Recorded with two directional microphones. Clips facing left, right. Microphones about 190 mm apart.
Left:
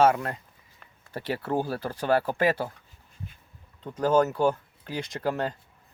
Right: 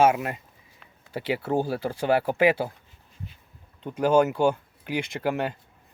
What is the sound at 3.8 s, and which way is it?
Speech, 10° right (ahead or behind).